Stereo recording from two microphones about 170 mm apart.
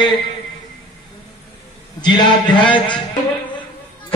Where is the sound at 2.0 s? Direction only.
25° left (ahead or behind).